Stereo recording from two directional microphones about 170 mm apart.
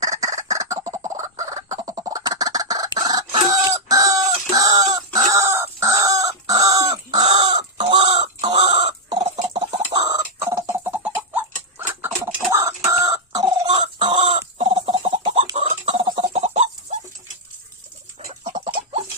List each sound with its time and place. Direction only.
0.0 s fowl: 20° right (ahead or behind)
1.8 s chicken: 20° right (ahead or behind)
7.2 s chicken: 35° right (ahead or behind)
15.9 s a sound: 30° right (ahead or behind)
18.6 s chicken: 40° right (ahead or behind)